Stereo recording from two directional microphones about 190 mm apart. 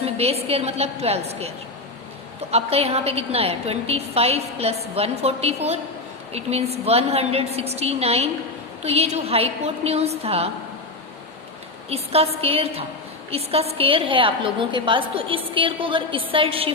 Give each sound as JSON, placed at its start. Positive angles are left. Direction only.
{"t": 0.0, "sound": "a woman's voice", "side_deg": -30}
{"t": 11.9, "sound": "a woman's voice", "side_deg": -30}